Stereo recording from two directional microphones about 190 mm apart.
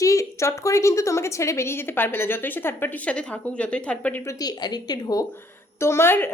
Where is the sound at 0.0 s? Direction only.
15° left (ahead or behind).